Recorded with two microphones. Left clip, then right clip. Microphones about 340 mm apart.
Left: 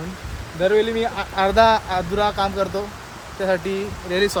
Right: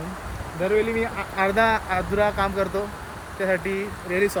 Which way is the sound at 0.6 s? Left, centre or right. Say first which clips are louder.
Left 4 dB; centre.